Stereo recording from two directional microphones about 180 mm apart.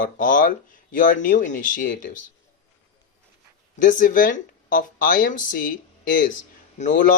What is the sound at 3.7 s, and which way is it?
Speech, 45° left (ahead or behind).